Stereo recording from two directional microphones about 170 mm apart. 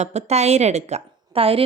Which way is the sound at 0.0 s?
40° right (ahead or behind).